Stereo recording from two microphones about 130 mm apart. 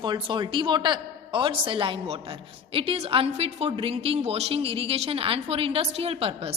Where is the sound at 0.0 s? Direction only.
35° right (ahead or behind).